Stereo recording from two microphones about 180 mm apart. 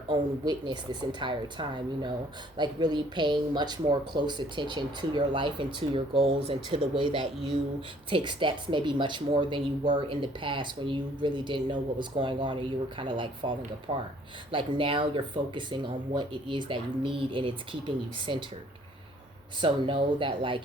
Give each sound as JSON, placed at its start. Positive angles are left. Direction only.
{"t": 0.1, "sound": "speech", "side_deg": -25}
{"t": 19.6, "sound": "speech", "side_deg": -30}